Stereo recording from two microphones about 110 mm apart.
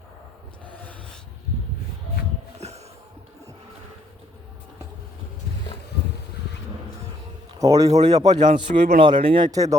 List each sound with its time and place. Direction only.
2.6 s a sound: 80° right
7.6 s speech: 30° right (ahead or behind); by 9.5 s 50° right (ahead or behind)
9.5 s speech: 30° right (ahead or behind)